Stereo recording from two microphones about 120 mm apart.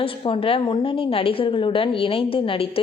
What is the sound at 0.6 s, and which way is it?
A woman's voice, 40° left (ahead or behind).